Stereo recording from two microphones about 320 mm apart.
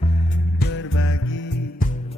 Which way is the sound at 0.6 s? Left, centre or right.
Left.